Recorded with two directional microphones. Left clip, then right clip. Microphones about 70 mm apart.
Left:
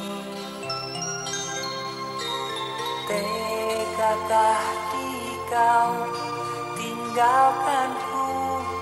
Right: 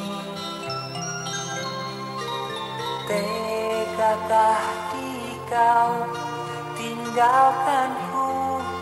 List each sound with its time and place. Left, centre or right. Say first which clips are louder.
3.1 s music: right 2 dB; left
7.2 s music: right 1 dB; left